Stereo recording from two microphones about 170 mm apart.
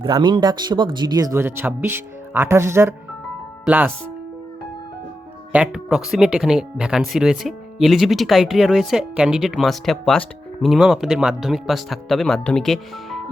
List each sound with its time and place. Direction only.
0.0 s speech: 25° right (ahead or behind); by 3.9 s 10° right (ahead or behind)
5.5 s speech: 5° right (ahead or behind)